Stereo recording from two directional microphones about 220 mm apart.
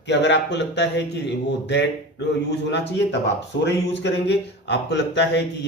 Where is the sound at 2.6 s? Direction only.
55° left (ahead or behind).